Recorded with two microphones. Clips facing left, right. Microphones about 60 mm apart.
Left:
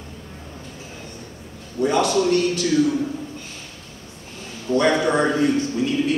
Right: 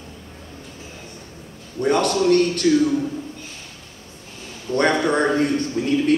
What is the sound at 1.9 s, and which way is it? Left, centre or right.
Speech, right.